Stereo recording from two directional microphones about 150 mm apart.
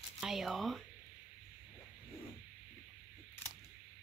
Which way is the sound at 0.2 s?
Centre (ahead or behind).